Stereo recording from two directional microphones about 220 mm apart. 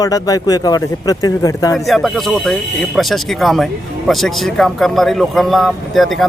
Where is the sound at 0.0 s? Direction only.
15° left (ahead or behind).